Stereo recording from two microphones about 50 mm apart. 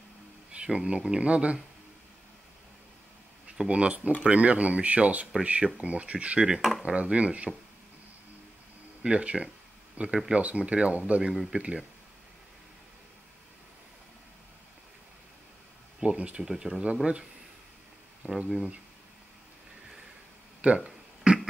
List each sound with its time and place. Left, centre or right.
0.5 s speech: centre
3.6 s speech: right
6.4 s speech: centre
9.0 s speech: right
16.0 s speech: right
16.4 s speech: centre
18.2 s speech: right
20.6 s a sound: right